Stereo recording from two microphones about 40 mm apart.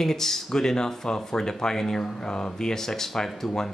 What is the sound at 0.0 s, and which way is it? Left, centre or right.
Speech, centre.